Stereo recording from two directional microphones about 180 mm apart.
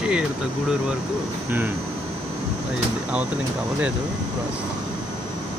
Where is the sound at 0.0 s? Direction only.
5° right (ahead or behind).